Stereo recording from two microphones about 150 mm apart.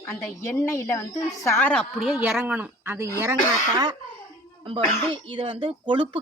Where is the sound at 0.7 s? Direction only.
20° left (ahead or behind).